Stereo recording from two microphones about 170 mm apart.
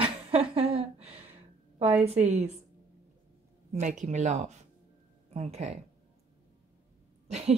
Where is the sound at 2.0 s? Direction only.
40° right (ahead or behind).